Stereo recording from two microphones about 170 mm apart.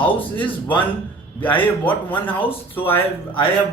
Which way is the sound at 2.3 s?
30° left (ahead or behind).